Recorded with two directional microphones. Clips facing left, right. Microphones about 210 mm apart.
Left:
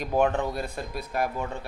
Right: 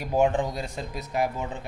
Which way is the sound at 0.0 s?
10° right (ahead or behind).